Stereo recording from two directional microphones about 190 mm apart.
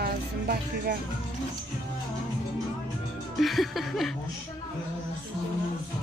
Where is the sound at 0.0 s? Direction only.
55° right (ahead or behind).